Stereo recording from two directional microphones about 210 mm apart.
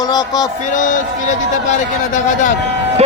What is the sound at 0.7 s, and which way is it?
A man's voice, 35° left (ahead or behind).